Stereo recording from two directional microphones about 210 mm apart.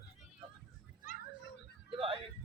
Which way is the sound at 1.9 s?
25° right (ahead or behind).